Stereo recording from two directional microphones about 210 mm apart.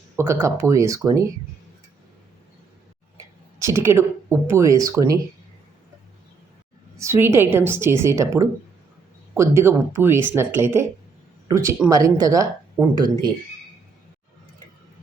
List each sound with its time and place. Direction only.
0.2 s speech: 15° right (ahead or behind)
3.6 s speech: 15° right (ahead or behind)
6.9 s speech: 15° right (ahead or behind)